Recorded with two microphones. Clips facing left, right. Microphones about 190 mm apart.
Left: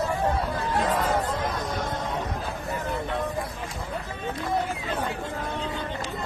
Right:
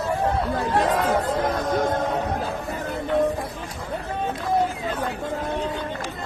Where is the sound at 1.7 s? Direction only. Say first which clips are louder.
Right 8 dB; 50° right (ahead or behind).